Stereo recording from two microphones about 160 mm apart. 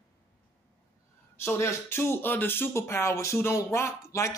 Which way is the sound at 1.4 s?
15° left (ahead or behind).